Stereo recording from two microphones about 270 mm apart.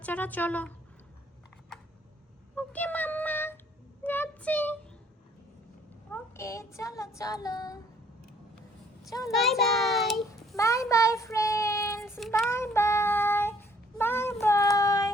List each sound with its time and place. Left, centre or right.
0.0 s a woman's voice: centre
2.6 s a sound: centre
6.1 s child singing: centre
9.0 s a child's voice: centre
9.3 s a child's voice: centre
10.6 s child singing: centre